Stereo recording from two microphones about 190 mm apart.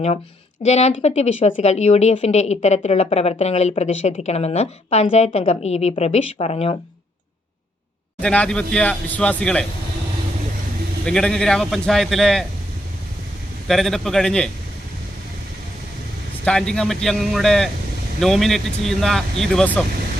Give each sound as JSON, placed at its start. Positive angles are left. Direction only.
{"t": 0.6, "sound": "a woman's voice", "side_deg": 35}
{"t": 8.2, "sound": "speech", "side_deg": 5}
{"t": 11.0, "sound": "speech", "side_deg": 5}
{"t": 13.7, "sound": "speech", "side_deg": 0}
{"t": 16.5, "sound": "speech", "side_deg": 5}